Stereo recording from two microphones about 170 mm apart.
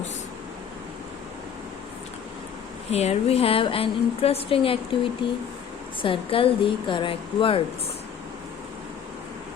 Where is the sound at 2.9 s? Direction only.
40° left (ahead or behind).